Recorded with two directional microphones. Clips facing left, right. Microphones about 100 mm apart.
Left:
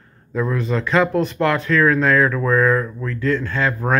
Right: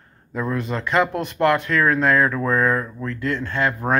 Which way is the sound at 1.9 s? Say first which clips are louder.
Left 2 dB; 25° right (ahead or behind).